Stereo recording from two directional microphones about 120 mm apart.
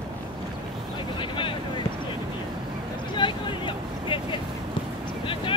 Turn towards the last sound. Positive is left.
turn(degrees=45)  # may be behind; listen again after turning